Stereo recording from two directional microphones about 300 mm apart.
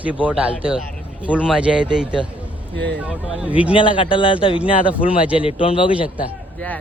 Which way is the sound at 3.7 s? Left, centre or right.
Centre.